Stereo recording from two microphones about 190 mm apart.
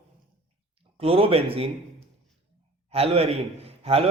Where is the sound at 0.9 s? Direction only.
30° right (ahead or behind).